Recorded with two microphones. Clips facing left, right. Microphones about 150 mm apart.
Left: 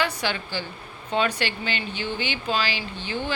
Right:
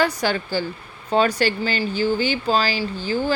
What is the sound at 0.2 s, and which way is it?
A woman's voice, 40° right (ahead or behind).